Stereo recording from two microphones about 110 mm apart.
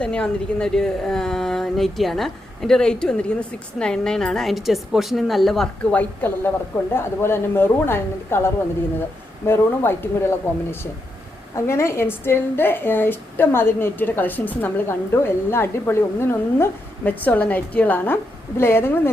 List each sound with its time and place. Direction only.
0.0 s a woman's voice: 10° left (ahead or behind)
5.8 s a woman's voice: 15° left (ahead or behind)